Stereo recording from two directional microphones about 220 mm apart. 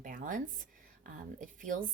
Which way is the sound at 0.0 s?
35° right (ahead or behind).